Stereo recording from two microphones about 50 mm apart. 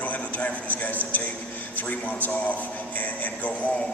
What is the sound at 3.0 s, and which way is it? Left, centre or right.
Music, left.